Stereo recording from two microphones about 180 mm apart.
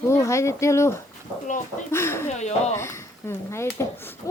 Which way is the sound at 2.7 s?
15° left (ahead or behind).